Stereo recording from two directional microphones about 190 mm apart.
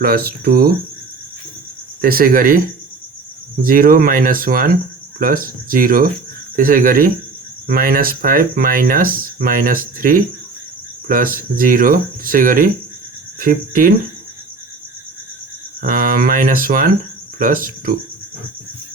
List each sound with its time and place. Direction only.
0.0 s speech: 50° right (ahead or behind)
2.0 s speech: 50° right (ahead or behind)
3.6 s speech: 50° right (ahead or behind)
15.8 s speech: 45° right (ahead or behind)